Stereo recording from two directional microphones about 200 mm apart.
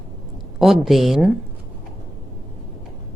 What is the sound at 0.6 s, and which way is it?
Speech, centre (ahead or behind).